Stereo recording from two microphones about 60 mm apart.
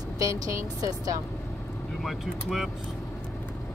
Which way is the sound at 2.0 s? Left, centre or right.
Centre.